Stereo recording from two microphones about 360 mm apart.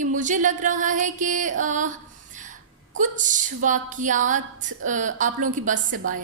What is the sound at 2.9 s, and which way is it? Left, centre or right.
A woman's voice, right.